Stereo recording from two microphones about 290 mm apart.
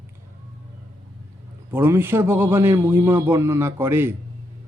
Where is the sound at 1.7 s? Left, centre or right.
Centre.